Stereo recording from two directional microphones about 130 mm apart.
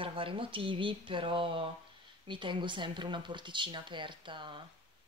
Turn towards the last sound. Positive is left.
turn(degrees=-40)  # may be behind; listen again after turning